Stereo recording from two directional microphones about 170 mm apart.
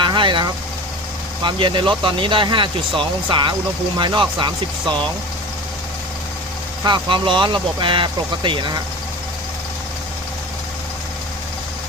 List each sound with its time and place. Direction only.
0.0 s vehicle: 25° right (ahead or behind)
1.5 s speech: 30° right (ahead or behind)
6.8 s speech: 30° right (ahead or behind)